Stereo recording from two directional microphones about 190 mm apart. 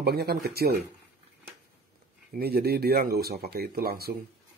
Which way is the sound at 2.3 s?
55° right (ahead or behind).